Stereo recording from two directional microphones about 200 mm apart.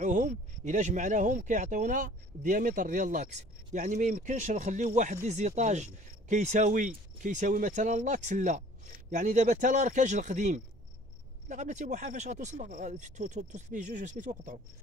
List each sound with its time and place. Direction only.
0.0 s speech: 40° right (ahead or behind)